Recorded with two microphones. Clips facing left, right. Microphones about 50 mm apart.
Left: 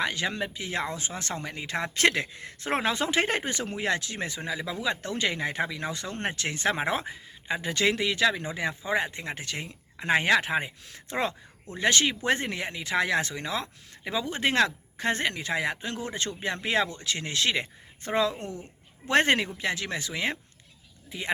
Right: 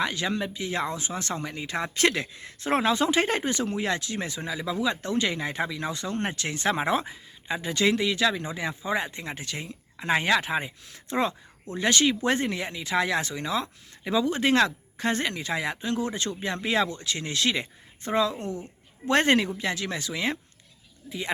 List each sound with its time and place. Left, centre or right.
0.0 s speech: left